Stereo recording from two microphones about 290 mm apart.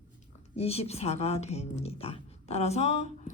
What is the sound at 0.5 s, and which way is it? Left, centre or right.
Speech, left.